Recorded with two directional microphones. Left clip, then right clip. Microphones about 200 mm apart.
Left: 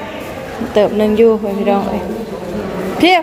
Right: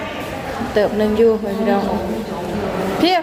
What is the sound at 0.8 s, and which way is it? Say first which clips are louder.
A woman's voice: left 4 dB; 20° left (ahead or behind).